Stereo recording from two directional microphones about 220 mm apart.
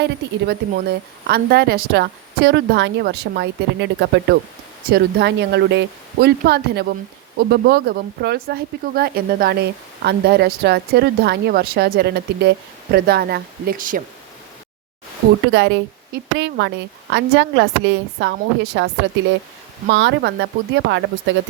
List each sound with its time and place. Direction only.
0.0 s speech: 50° right (ahead or behind)
15.5 s speech: 50° right (ahead or behind)
19.9 s speech: 55° right (ahead or behind)